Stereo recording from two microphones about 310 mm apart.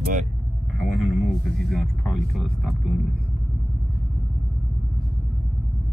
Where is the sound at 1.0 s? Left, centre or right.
Centre.